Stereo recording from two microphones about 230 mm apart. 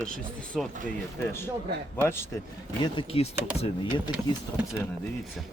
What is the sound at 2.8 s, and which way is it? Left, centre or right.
Speech, left.